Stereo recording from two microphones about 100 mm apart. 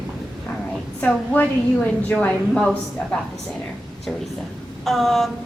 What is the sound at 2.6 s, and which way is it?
Speech, 5° left (ahead or behind).